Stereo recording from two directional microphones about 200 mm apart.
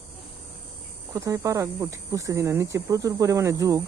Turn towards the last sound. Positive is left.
turn(degrees=-15)  # may be behind; listen again after turning